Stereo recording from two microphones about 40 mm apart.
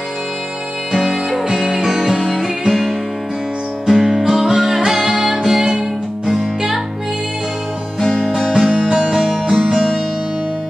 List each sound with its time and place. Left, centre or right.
0.9 s music: centre
3.9 s music: centre
8.4 s music: centre
8.6 s music: right
9.1 s music: centre